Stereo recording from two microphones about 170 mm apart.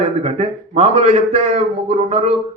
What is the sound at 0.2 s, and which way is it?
Speech, 35° right (ahead or behind).